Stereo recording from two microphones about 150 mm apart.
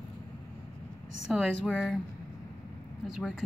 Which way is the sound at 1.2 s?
Centre (ahead or behind).